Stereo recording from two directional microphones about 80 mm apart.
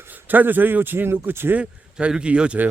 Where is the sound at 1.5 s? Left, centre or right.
Centre.